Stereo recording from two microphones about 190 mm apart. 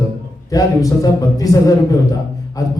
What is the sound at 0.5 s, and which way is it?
A man's voice, 20° left (ahead or behind).